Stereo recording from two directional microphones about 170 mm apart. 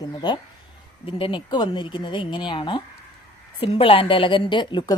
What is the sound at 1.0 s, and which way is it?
A woman's voice, 30° left (ahead or behind).